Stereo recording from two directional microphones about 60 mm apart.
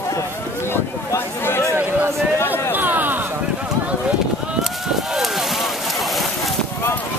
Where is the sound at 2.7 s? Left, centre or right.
Right.